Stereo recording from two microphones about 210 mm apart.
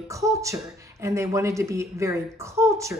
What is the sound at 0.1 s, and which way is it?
Speech, 15° right (ahead or behind).